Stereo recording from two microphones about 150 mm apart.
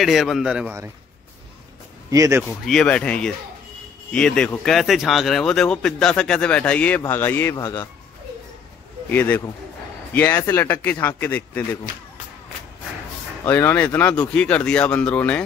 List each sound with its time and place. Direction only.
0.0 s speech: centre (ahead or behind)
2.0 s speech: 20° right (ahead or behind)
2.6 s speech: 5° left (ahead or behind)
7.5 s speech: 25° left (ahead or behind)
9.1 s speech: 15° left (ahead or behind)
13.4 s speech: 15° left (ahead or behind)